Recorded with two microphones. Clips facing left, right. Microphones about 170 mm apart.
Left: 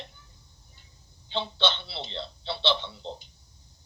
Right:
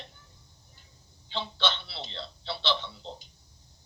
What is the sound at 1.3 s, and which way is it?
Speech, 25° left (ahead or behind).